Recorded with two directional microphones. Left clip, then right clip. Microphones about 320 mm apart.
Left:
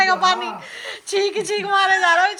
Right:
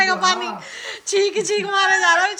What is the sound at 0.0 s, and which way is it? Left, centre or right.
Speech, centre.